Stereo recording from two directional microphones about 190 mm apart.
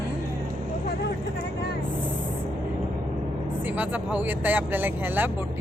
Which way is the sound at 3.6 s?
10° right (ahead or behind).